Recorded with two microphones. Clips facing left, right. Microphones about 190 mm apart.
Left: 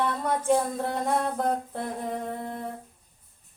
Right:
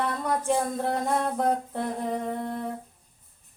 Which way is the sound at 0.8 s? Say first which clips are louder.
Right 1 dB; centre (ahead or behind).